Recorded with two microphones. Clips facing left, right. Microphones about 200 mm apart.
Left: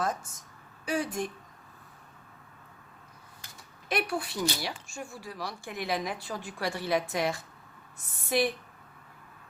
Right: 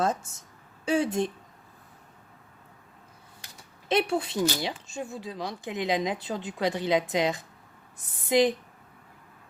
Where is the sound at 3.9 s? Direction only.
25° right (ahead or behind).